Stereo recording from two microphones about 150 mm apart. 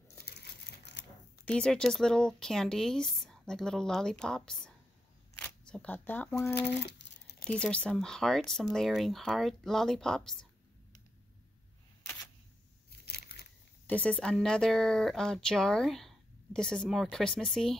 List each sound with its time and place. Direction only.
1.4 s speech: 5° left (ahead or behind)
13.0 s a sound: 90° left
13.8 s speech: 10° left (ahead or behind)